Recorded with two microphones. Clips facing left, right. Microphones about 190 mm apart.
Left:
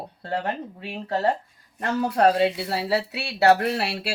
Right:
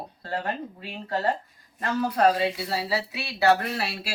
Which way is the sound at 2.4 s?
65° left (ahead or behind).